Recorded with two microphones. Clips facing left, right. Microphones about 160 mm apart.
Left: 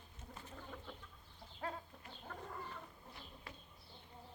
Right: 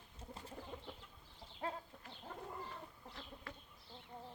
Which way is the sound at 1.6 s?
25° right (ahead or behind).